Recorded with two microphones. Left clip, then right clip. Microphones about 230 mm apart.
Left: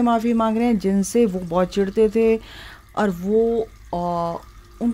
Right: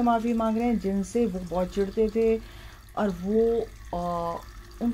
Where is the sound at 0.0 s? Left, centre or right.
Left.